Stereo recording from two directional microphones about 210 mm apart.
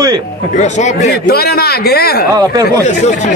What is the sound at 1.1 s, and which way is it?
A man's voice, 50° left (ahead or behind).